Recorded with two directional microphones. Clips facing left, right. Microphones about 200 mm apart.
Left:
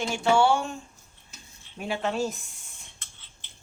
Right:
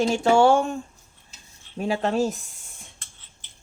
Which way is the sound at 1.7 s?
40° right (ahead or behind).